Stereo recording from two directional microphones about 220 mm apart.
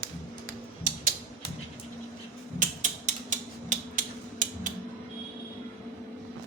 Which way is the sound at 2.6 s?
35° right (ahead or behind).